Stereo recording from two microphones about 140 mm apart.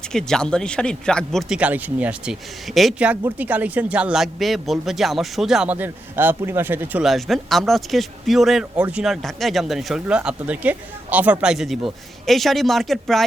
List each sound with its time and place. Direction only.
0.1 s speech: 5° left (ahead or behind)
5.7 s speech: 15° right (ahead or behind)
7.0 s speech: centre (ahead or behind)